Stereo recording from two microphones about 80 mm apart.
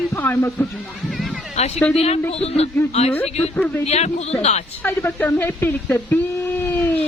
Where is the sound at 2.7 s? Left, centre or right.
Left.